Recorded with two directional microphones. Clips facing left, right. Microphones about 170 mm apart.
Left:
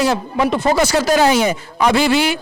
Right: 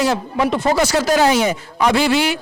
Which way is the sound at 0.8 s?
10° left (ahead or behind).